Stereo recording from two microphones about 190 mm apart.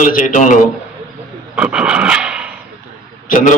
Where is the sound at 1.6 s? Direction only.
5° right (ahead or behind).